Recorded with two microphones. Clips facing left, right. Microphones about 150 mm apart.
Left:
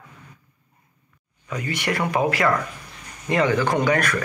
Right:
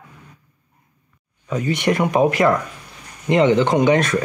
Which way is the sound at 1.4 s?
20° right (ahead or behind).